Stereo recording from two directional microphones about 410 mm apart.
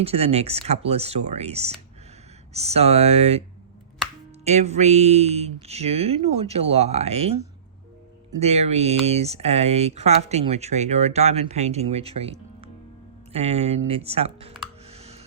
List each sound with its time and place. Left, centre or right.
0.0 s speech: centre
4.4 s speech: centre
14.8 s a sound: centre